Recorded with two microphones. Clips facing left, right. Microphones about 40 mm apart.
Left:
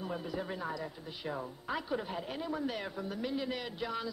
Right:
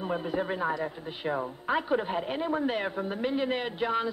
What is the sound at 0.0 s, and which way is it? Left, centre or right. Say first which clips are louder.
Speech: right 8 dB; right.